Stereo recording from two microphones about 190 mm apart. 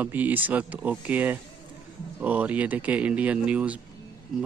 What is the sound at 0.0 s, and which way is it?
Speech, 10° right (ahead or behind).